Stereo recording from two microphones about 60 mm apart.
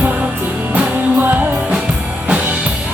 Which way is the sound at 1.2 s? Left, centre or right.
Right.